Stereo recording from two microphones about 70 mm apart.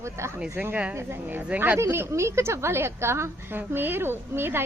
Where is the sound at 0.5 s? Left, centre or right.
Right.